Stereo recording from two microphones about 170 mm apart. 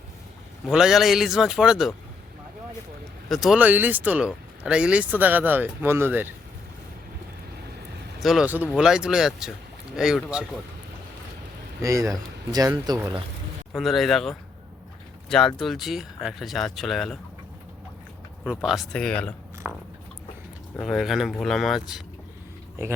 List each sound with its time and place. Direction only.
0.7 s speech: 5° right (ahead or behind)
3.2 s speech: centre (ahead or behind)
8.2 s speech: centre (ahead or behind)
11.8 s speech: 20° right (ahead or behind)
13.7 s speech: centre (ahead or behind)
18.6 s speech: centre (ahead or behind)
20.7 s speech: centre (ahead or behind)